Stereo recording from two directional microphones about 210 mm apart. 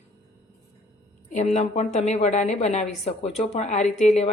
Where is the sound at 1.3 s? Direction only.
35° left (ahead or behind).